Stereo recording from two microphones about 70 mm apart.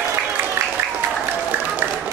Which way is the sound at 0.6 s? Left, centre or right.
Right.